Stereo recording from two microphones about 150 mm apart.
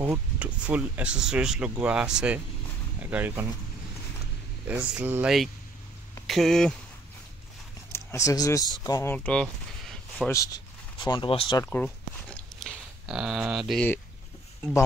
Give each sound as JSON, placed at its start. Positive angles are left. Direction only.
{"t": 0.0, "sound": "speech", "side_deg": -10}
{"t": 4.6, "sound": "speech", "side_deg": -10}
{"t": 6.2, "sound": "speech", "side_deg": 0}
{"t": 7.9, "sound": "speech", "side_deg": 20}
{"t": 9.1, "sound": "a sound", "side_deg": 10}
{"t": 10.3, "sound": "speech", "side_deg": 25}
{"t": 11.6, "sound": "a sound", "side_deg": 10}